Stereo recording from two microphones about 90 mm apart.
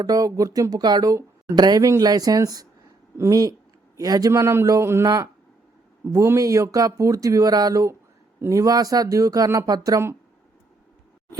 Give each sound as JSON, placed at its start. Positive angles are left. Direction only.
{"t": 0.0, "sound": "a man's voice", "side_deg": -45}
{"t": 4.3, "sound": "speech", "side_deg": -30}
{"t": 5.0, "sound": "speech", "side_deg": -45}